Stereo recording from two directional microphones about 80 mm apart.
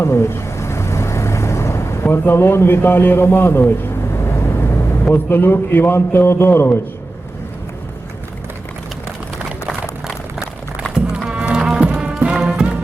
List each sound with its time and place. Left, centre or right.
0.0 s vehicle: left
2.0 s a man's voice: left
4.1 s vehicle: left
5.1 s a man's voice: left
10.9 s music: centre